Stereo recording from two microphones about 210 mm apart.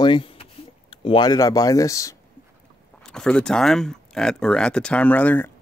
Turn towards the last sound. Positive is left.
turn(degrees=10)  # may be behind; listen again after turning